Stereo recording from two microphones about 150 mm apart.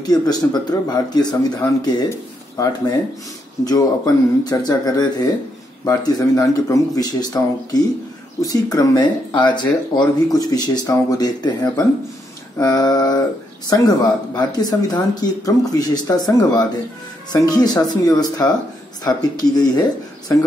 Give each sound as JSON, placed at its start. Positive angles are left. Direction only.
{"t": 0.0, "sound": "speech", "side_deg": 25}